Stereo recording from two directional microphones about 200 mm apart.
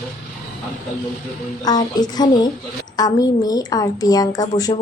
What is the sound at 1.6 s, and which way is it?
Speech, 20° left (ahead or behind).